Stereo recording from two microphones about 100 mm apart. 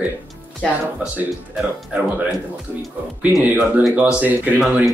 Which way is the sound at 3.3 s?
20° right (ahead or behind).